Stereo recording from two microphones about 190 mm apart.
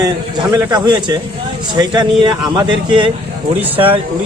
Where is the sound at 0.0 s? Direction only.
20° right (ahead or behind).